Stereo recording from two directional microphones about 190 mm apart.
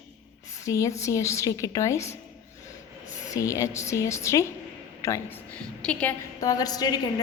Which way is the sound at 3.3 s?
15° left (ahead or behind).